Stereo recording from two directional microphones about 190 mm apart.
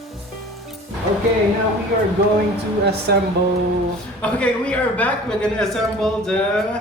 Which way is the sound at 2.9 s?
60° right (ahead or behind).